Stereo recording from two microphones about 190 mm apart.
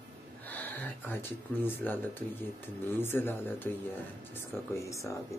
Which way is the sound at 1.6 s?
10° left (ahead or behind).